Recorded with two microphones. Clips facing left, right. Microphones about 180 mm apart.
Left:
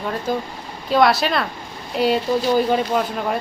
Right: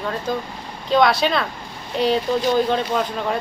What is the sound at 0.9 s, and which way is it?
Speech, 5° left (ahead or behind).